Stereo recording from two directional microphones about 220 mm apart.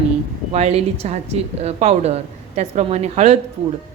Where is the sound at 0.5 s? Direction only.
30° right (ahead or behind).